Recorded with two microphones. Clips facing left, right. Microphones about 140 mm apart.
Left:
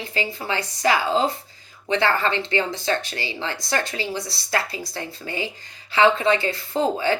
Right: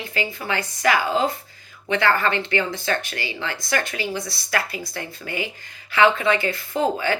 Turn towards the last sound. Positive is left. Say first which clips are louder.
# left 1 dB
turn(degrees=25)  # may be behind; listen again after turning